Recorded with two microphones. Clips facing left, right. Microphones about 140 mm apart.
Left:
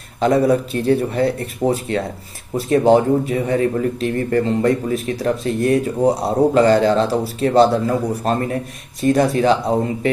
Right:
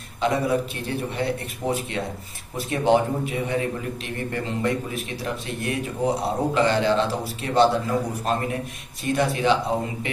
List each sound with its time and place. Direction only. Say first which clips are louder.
0.2 s a man's voice: left 7 dB; 40° left (ahead or behind)